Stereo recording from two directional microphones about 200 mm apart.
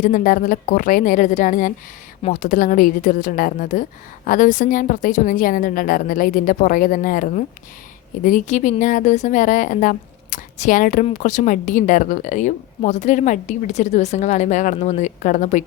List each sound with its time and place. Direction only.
0.0 s a woman's voice: 40° left (ahead or behind)